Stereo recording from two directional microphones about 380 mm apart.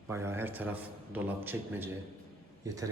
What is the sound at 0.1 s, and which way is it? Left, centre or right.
A man's voice, centre.